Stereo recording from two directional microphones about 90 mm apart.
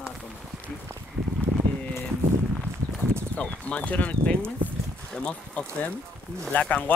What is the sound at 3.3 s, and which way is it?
Speech, 15° left (ahead or behind).